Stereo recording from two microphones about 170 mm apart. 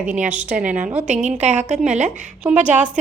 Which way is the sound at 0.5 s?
45° right (ahead or behind).